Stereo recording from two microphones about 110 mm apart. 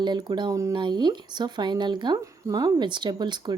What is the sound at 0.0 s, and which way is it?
Speech, 45° right (ahead or behind).